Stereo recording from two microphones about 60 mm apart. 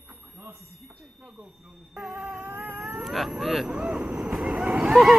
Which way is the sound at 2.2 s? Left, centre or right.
Right.